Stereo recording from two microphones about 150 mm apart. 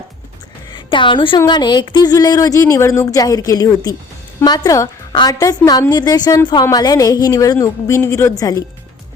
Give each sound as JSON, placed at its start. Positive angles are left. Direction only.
{"t": 0.7, "sound": "a woman's voice", "side_deg": 35}